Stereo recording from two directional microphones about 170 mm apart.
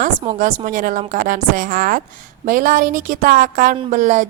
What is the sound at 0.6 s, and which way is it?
A woman's voice, 55° right (ahead or behind).